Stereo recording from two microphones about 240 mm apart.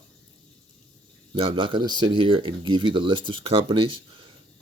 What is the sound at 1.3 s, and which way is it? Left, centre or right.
Speech, centre.